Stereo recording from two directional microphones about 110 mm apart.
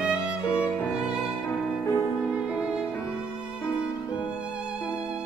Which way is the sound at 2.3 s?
10° right (ahead or behind).